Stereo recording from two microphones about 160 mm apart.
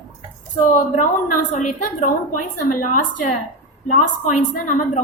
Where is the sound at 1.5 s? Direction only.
55° left (ahead or behind).